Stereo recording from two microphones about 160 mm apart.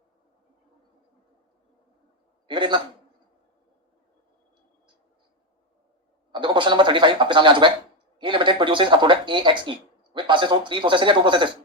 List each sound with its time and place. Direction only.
2.5 s speech: 30° right (ahead or behind)
6.3 s a sound: 30° right (ahead or behind)
8.2 s speech: 30° right (ahead or behind)